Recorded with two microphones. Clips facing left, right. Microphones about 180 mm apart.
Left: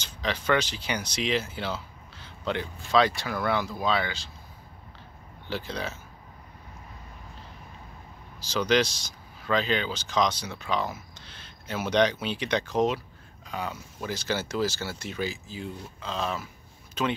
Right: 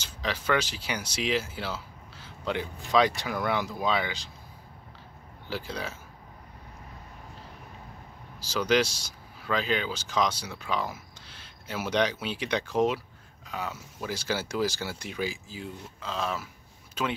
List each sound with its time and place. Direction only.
0.0 s speech: 5° right (ahead or behind)
5.5 s speech: 10° right (ahead or behind)
8.4 s speech: 5° right (ahead or behind)